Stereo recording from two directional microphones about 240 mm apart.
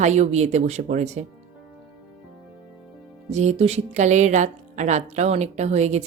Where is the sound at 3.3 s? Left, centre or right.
Right.